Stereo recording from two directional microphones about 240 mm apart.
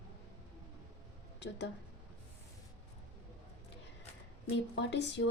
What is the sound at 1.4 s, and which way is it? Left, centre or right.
Speech, left.